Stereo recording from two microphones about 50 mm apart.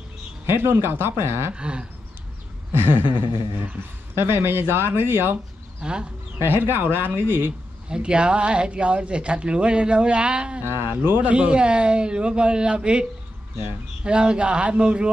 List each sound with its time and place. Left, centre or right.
0.5 s speech: right
1.5 s speech: centre
2.7 s a sound: right
4.1 s speech: right
5.8 s speech: centre
6.4 s speech: right
7.9 s speech: centre
10.6 s speech: right
11.3 s speech: right
14.0 s speech: centre